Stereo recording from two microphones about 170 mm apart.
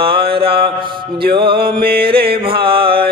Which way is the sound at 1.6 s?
60° right (ahead or behind).